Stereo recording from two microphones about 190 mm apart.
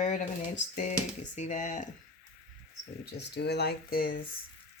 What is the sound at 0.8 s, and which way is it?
Speech, 40° left (ahead or behind).